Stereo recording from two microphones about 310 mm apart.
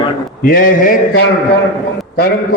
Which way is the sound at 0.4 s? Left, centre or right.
Left.